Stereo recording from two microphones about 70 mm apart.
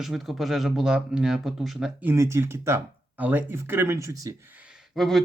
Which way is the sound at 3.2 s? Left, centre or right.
Right.